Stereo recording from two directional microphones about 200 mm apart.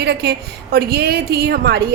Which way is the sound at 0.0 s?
55° right (ahead or behind).